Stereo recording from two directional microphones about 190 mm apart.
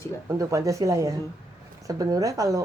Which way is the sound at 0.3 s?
15° right (ahead or behind).